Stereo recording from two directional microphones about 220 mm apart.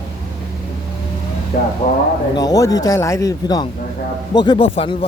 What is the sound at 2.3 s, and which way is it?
A man's voice, 15° left (ahead or behind).